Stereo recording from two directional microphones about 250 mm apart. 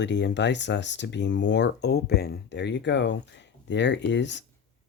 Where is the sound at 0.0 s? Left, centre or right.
Left.